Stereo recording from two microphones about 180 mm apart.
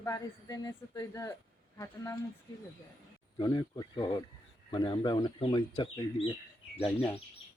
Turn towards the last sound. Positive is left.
turn(degrees=5)  # may be behind; listen again after turning